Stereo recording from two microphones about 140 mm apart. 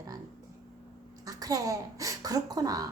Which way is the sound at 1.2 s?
25° right (ahead or behind).